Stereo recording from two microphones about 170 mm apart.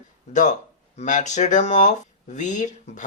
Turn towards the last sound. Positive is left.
turn(degrees=45)  # may be behind; listen again after turning